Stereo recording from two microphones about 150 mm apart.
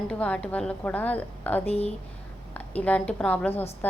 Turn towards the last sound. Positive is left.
turn(degrees=10)  # may be behind; listen again after turning